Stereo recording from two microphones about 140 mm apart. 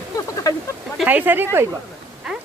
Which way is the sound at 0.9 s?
10° right (ahead or behind).